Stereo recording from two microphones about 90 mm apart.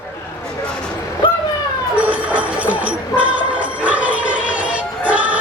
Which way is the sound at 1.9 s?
15° right (ahead or behind).